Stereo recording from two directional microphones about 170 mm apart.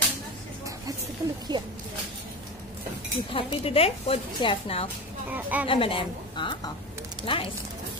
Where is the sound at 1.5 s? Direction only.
25° right (ahead or behind).